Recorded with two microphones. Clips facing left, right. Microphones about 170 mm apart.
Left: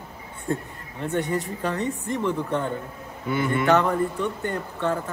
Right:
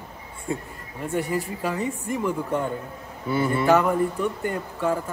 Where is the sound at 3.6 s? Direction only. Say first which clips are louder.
Right 1 dB; 5° right (ahead or behind).